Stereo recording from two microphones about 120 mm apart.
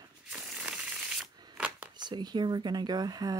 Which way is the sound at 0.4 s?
10° right (ahead or behind).